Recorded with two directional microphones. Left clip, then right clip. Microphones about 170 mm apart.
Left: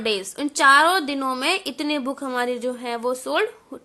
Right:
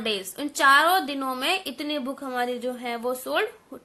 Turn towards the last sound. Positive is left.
turn(degrees=30)  # may be behind; listen again after turning